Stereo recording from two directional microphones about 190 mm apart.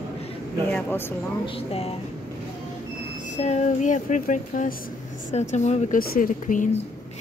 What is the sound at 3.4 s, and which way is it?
Speech, 35° left (ahead or behind).